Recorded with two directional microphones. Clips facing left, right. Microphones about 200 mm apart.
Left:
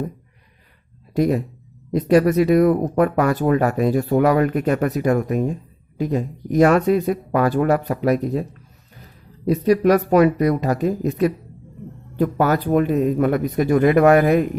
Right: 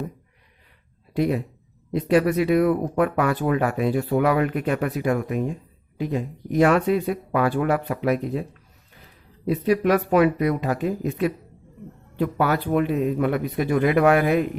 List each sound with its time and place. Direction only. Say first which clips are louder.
1.1 s speech: left 4 dB; 40° left (ahead or behind)
9.5 s speech: left 4 dB; 40° left (ahead or behind)